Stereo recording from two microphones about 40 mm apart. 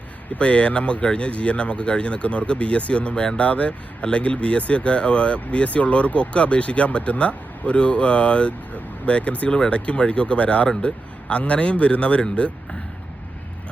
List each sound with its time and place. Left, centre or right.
0.3 s speech: left